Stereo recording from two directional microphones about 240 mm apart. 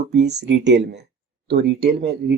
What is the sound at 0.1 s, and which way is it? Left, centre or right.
Speech, right.